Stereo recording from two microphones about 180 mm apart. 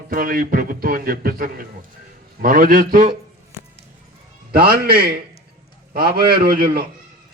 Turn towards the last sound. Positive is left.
turn(degrees=-55)  # may be behind; listen again after turning